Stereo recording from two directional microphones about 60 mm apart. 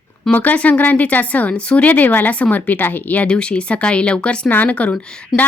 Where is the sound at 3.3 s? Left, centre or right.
Centre.